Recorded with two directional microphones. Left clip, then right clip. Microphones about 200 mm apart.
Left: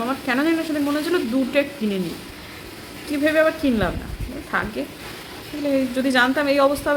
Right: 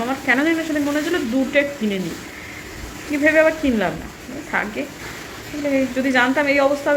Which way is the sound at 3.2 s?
5° left (ahead or behind).